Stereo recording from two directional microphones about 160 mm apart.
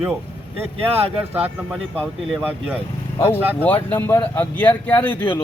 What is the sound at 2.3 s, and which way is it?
Speech, 10° right (ahead or behind).